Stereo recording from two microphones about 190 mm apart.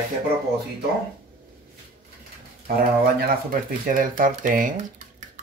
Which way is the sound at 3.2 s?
45° right (ahead or behind).